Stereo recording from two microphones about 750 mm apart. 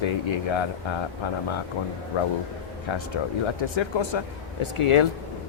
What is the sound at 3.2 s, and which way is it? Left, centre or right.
Speech, left.